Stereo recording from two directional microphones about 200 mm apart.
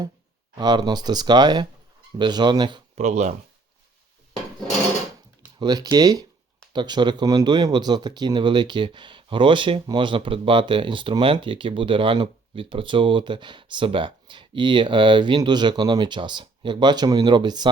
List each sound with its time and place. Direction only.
0.5 s speech: 20° right (ahead or behind)
2.9 s speech: 35° right (ahead or behind)
5.5 s speech: 20° right (ahead or behind)